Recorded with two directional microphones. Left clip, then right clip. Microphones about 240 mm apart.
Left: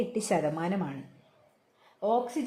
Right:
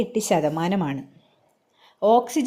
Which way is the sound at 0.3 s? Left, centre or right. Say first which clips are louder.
Right 7 dB; centre.